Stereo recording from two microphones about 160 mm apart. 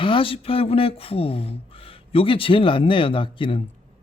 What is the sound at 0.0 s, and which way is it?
Speech, 35° left (ahead or behind).